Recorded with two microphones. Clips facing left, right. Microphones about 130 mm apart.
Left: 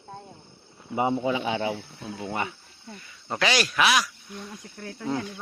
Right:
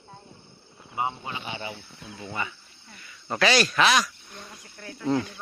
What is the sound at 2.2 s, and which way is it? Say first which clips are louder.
Speech: left 3 dB; 55° left (ahead or behind).